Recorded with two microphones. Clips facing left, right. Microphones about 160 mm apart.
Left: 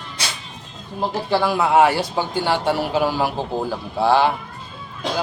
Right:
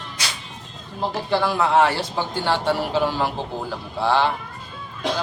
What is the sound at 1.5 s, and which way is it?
A man's voice, 10° left (ahead or behind).